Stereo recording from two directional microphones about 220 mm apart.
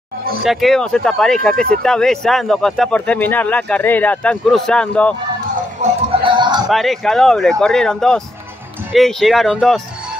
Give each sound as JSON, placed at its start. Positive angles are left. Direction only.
{"t": 0.4, "sound": "speech", "side_deg": 0}
{"t": 5.8, "sound": "music", "side_deg": -20}
{"t": 6.7, "sound": "speech", "side_deg": 0}